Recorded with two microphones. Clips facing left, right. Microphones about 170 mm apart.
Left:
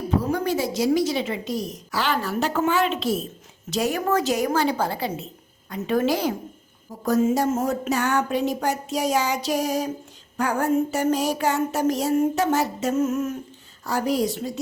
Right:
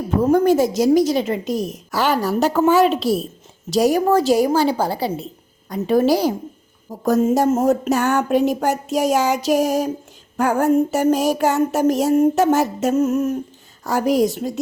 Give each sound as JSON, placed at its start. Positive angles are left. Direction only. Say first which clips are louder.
{"t": 0.2, "sound": "a woman's voice", "louder": "right 12 dB", "side_deg": -45}